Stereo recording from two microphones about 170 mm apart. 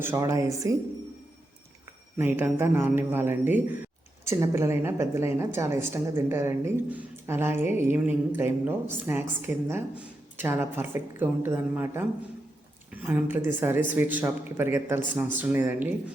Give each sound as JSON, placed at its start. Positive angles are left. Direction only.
{"t": 0.0, "sound": "speech", "side_deg": -15}
{"t": 2.1, "sound": "a woman's voice", "side_deg": -10}